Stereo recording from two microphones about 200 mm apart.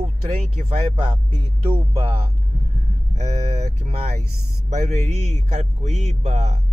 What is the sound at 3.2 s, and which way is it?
Speech, 35° right (ahead or behind).